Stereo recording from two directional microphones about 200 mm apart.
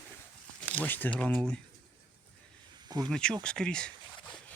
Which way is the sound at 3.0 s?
5° left (ahead or behind).